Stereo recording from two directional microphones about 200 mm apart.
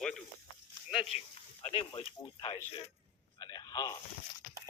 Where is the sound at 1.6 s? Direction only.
30° left (ahead or behind).